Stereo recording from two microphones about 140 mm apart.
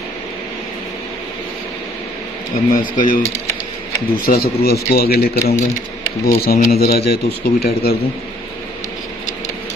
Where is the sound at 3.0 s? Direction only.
70° left (ahead or behind).